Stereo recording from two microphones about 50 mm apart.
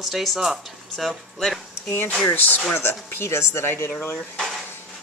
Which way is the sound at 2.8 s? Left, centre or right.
Left.